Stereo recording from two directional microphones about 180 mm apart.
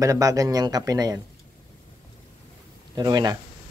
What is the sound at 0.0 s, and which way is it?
Speech, 20° right (ahead or behind).